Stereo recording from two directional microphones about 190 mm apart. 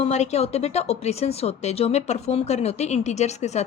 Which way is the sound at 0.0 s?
35° left (ahead or behind).